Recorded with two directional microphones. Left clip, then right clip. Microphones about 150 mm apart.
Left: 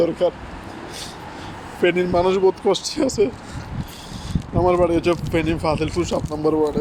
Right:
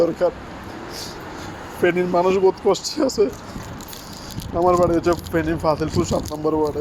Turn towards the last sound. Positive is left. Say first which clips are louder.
# left 1 dB
turn(degrees=15)  # may be behind; listen again after turning